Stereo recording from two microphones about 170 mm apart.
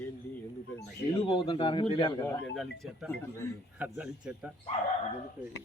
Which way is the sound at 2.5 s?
Centre (ahead or behind).